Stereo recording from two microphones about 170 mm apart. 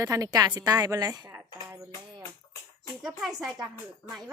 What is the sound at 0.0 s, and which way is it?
A woman's voice, 20° right (ahead or behind).